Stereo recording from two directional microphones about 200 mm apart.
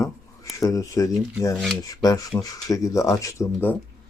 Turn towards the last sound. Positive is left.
turn(degrees=10)  # may be behind; listen again after turning